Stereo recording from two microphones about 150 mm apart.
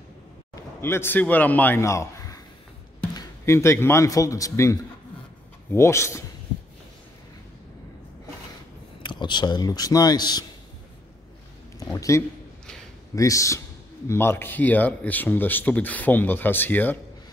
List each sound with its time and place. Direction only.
0.7 s a man's voice: 15° left (ahead or behind)
9.0 s speech: 30° left (ahead or behind)
11.8 s a sound: 25° left (ahead or behind)
13.1 s a man's voice: 20° left (ahead or behind)